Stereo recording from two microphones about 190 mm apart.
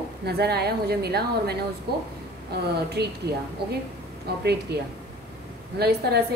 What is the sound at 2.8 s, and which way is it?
Speech, 60° right (ahead or behind).